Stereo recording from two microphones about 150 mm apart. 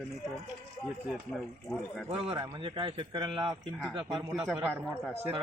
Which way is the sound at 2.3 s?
30° right (ahead or behind).